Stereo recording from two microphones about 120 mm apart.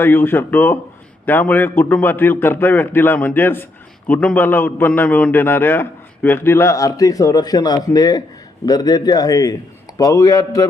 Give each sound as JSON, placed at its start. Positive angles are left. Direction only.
{"t": 0.0, "sound": "a man's voice", "side_deg": 20}